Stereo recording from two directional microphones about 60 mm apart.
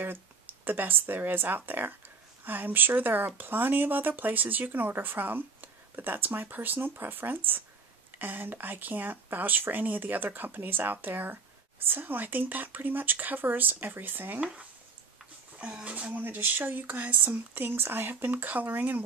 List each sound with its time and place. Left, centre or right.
0.0 s speech: right
15.6 s speech: right